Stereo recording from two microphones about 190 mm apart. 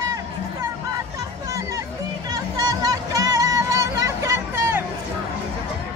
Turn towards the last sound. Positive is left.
turn(degrees=-15)  # may be behind; listen again after turning